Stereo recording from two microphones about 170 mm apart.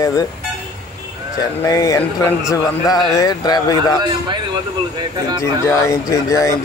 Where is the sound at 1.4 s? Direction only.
20° left (ahead or behind).